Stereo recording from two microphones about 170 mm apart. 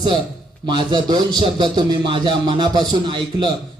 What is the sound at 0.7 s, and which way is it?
A man's voice, 25° right (ahead or behind).